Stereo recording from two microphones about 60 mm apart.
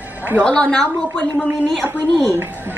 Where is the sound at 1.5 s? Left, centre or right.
Right.